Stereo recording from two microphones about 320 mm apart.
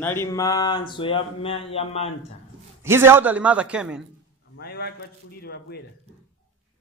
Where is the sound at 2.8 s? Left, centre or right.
Centre.